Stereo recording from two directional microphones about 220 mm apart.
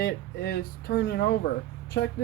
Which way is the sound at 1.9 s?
55° left (ahead or behind).